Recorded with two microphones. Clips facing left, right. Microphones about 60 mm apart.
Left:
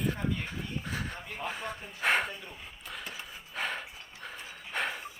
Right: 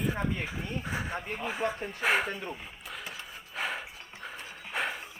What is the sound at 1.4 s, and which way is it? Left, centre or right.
Speech, centre.